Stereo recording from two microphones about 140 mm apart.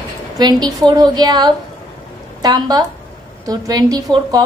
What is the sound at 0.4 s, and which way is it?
A woman's voice, 30° right (ahead or behind).